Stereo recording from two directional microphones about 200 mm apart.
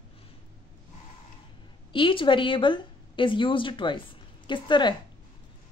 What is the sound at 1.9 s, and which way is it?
A woman's voice, 25° left (ahead or behind).